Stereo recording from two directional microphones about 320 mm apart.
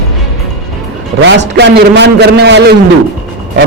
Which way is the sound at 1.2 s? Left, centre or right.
Right.